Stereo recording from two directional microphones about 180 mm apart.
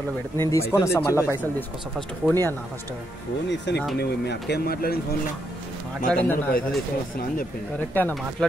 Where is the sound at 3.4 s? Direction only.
80° left.